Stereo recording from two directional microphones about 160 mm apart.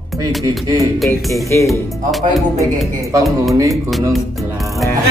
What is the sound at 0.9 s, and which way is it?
Speech, centre (ahead or behind).